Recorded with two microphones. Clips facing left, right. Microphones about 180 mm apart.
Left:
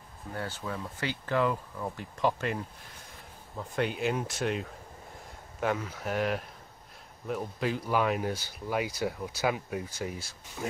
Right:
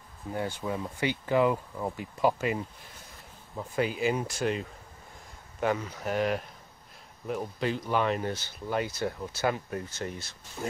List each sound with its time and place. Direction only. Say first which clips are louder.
0.3 s speech: right 4 dB; 15° right (ahead or behind); by 10.7 s 5° left (ahead or behind)